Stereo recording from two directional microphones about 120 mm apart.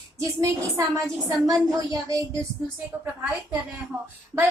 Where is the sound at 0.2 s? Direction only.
30° right (ahead or behind).